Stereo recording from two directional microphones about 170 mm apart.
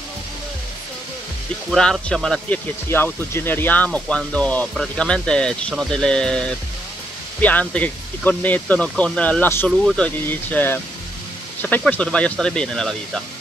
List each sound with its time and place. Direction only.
1.7 s speech: 5° left (ahead or behind)
2.9 s speech: 15° left (ahead or behind)
9.7 s speech: centre (ahead or behind)